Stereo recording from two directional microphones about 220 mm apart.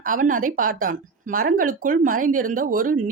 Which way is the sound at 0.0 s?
40° right (ahead or behind).